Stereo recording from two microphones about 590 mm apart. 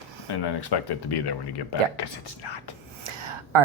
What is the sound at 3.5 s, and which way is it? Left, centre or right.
Speech, right.